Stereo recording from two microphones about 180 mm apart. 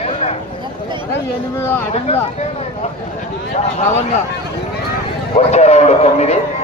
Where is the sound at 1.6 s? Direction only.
15° left (ahead or behind).